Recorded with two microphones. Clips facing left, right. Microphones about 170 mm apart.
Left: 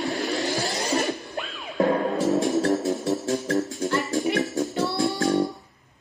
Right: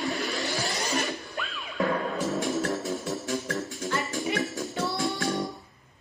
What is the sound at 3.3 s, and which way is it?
Music, 35° left (ahead or behind).